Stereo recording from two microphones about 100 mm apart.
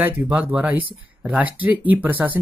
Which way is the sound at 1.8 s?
15° right (ahead or behind).